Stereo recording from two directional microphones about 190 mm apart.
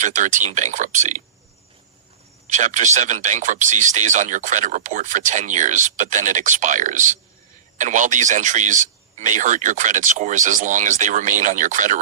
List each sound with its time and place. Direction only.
0.0 s speech: 40° right (ahead or behind)
2.5 s speech: 40° right (ahead or behind)